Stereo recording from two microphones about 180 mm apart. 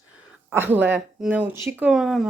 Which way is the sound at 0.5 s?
10° right (ahead or behind).